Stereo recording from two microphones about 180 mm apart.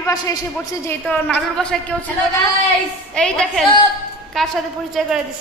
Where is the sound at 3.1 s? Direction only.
5° left (ahead or behind).